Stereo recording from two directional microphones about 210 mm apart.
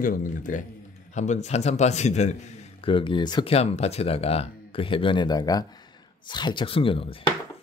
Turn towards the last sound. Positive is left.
turn(degrees=25)  # may be behind; listen again after turning